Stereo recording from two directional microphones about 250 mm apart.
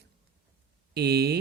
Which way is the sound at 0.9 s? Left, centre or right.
Right.